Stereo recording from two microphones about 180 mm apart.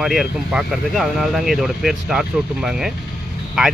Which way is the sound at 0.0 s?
Centre (ahead or behind).